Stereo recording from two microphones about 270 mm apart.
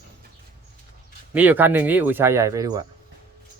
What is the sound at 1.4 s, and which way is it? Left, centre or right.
Speech, centre.